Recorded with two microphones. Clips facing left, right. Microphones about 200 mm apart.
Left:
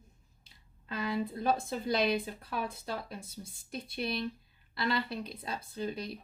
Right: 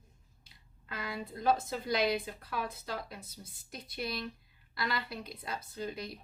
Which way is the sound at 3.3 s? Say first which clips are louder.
Left 6 dB; 30° left (ahead or behind).